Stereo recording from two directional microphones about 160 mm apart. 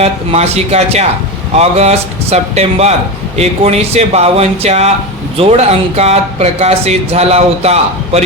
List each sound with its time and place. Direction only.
0.0 s speech: 40° right (ahead or behind)